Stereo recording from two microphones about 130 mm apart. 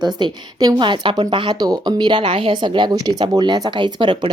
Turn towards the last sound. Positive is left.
turn(degrees=-35)  # may be behind; listen again after turning